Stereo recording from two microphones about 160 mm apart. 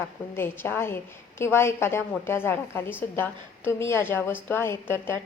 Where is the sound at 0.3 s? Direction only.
15° left (ahead or behind).